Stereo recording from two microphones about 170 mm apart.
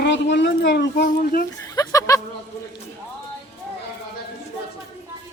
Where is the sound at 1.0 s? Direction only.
55° left (ahead or behind).